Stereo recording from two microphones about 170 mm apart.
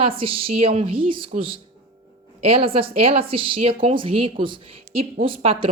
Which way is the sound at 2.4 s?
35° right (ahead or behind).